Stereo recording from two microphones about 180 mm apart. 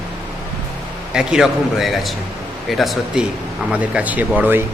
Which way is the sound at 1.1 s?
5° right (ahead or behind).